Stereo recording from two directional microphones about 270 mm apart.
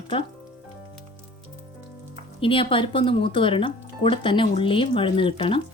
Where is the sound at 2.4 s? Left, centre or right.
Centre.